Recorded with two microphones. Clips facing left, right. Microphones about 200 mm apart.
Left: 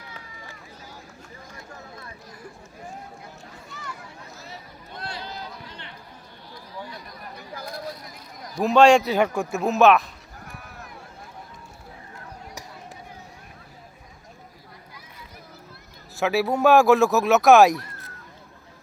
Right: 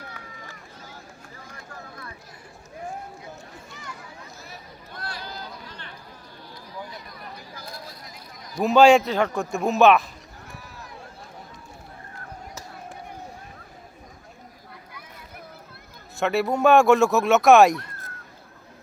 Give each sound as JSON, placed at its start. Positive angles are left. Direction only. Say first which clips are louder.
{"t": 1.5, "sound": "vehicle", "louder": "even", "side_deg": 25}
{"t": 4.9, "sound": "a sound", "louder": "left 2 dB", "side_deg": 25}
{"t": 8.5, "sound": "speech", "louder": "even", "side_deg": 0}
{"t": 9.1, "sound": "speech", "louder": "left 2 dB", "side_deg": 10}
{"t": 14.9, "sound": "boat", "louder": "right 3 dB", "side_deg": -55}
{"t": 16.1, "sound": "speech", "louder": "even", "side_deg": 5}